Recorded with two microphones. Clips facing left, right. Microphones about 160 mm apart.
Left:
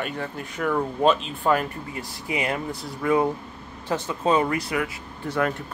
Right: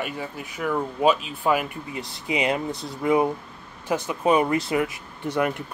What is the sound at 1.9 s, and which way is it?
Speech, 20° right (ahead or behind).